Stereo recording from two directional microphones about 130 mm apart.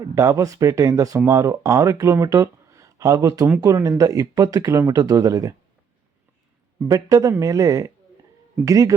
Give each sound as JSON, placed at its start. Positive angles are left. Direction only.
{"t": 0.0, "sound": "speech", "side_deg": -25}
{"t": 6.8, "sound": "speech", "side_deg": -25}